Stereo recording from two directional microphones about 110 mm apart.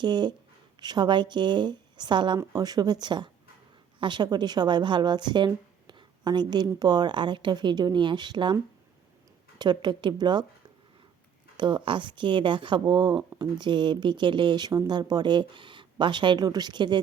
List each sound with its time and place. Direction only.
0.0 s speech: 45° right (ahead or behind)
2.4 s speech: 35° right (ahead or behind)
5.9 s a sound: 40° right (ahead or behind)
6.7 s speech: 40° right (ahead or behind)
9.6 s speech: 40° right (ahead or behind)
11.5 s speech: 45° right (ahead or behind)